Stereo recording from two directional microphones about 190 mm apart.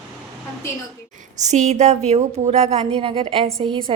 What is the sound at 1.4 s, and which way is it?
A woman's voice, 40° right (ahead or behind).